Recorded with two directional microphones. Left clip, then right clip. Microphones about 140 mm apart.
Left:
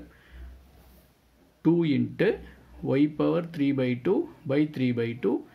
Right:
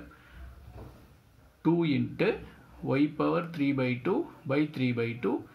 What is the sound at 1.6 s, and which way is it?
Speech, 30° left (ahead or behind).